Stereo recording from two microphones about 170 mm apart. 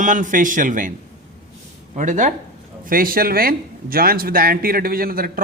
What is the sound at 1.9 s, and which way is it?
Speech, 50° right (ahead or behind).